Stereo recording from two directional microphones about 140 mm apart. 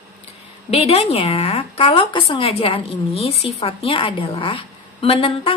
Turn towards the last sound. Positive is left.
turn(degrees=40)  # may be behind; listen again after turning